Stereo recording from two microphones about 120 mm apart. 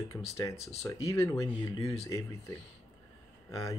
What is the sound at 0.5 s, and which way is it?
Speech, 60° left (ahead or behind).